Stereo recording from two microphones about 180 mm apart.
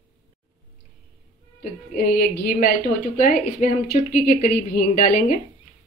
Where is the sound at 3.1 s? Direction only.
40° left (ahead or behind).